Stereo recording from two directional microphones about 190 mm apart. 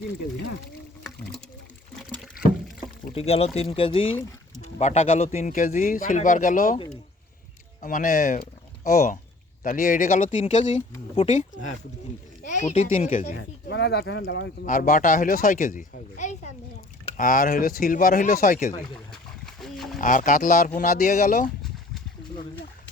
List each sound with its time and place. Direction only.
3.1 s speech: 30° left (ahead or behind)
7.8 s speech: 45° left (ahead or behind)
13.7 s speech: 65° left (ahead or behind)
14.6 s speech: 45° left (ahead or behind)
19.1 s a sound: centre (ahead or behind)
20.0 s speech: 45° left (ahead or behind)